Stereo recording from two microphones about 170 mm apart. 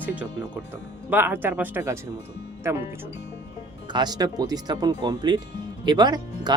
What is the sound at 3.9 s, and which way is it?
Speech, 25° right (ahead or behind).